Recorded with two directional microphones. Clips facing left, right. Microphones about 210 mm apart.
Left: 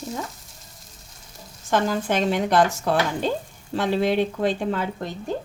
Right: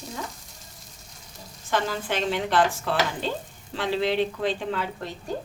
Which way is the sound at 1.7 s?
45° left (ahead or behind).